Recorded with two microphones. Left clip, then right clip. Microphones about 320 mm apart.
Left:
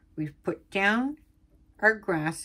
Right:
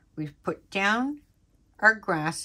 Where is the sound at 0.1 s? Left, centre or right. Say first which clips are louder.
Even; centre.